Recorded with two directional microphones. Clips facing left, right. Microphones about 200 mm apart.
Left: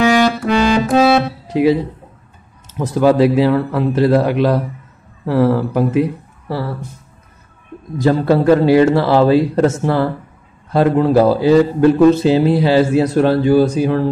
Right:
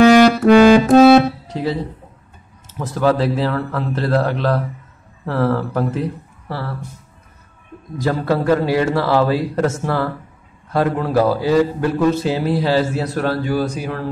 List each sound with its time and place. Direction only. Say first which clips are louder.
0.0 s music: right 4 dB; 45° right (ahead or behind)
1.5 s speech: left 9 dB; 15° left (ahead or behind)
2.8 s speech: left 5 dB; 15° left (ahead or behind)
8.0 s a man's voice: left 5 dB; 25° left (ahead or behind)